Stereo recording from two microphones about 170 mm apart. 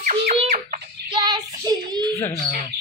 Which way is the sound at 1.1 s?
25° right (ahead or behind).